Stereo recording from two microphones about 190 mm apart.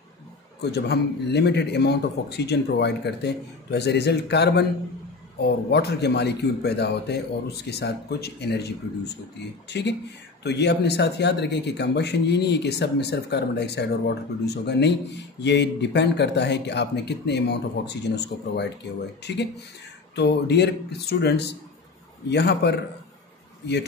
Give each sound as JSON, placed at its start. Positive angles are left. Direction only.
{"t": 0.6, "sound": "speech", "side_deg": 60}